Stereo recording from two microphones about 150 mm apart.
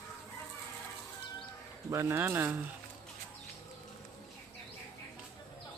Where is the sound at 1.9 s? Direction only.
15° right (ahead or behind).